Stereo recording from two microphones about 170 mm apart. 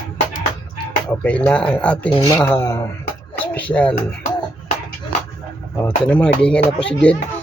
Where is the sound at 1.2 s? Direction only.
5° left (ahead or behind).